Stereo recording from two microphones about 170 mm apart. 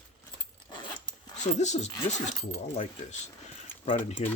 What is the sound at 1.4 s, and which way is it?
Speech, 45° left (ahead or behind).